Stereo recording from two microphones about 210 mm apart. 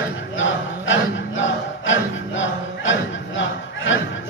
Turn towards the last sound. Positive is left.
turn(degrees=65)  # may be behind; listen again after turning